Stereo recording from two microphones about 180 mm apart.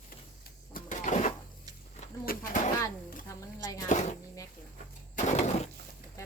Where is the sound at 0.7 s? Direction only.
45° left (ahead or behind).